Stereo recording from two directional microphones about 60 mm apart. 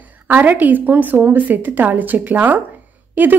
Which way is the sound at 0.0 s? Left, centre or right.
Right.